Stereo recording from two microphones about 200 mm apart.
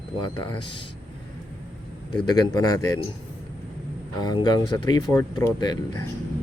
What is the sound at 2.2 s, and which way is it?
Speech, 20° left (ahead or behind).